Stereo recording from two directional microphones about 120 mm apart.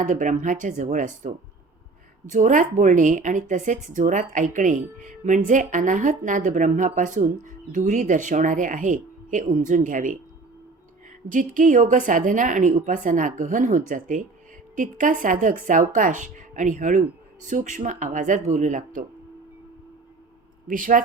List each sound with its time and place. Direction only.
0.0 s speech: 90° right
11.3 s speech: 90° right
20.7 s speech: 90° right